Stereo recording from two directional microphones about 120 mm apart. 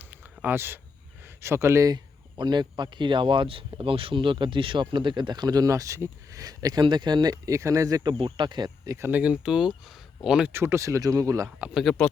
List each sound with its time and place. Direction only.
0.0 s a sound: 15° right (ahead or behind)
1.2 s speech: 20° right (ahead or behind)
9.0 s speech: 15° right (ahead or behind)
10.5 s speech: 20° right (ahead or behind)
11.4 s speech: 5° right (ahead or behind)